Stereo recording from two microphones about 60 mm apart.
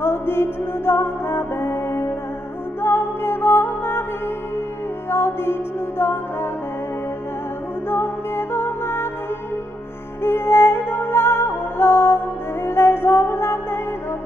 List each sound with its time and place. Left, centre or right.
0.0 s music: left
5.1 s music: left
7.9 s music: left
10.2 s music: left